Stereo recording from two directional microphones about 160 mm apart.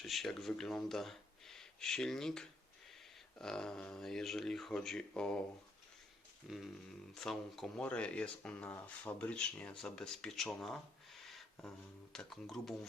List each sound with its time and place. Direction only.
0.0 s speech: centre (ahead or behind)
6.5 s speech: centre (ahead or behind)